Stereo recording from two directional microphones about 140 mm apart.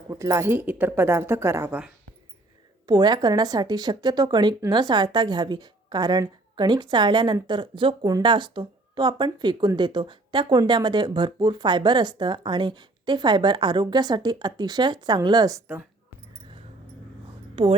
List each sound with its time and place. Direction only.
0.1 s speech: 20° right (ahead or behind)
2.8 s a woman's voice: 30° right (ahead or behind)
15.6 s speech: 15° right (ahead or behind)
17.5 s a sound: 40° right (ahead or behind)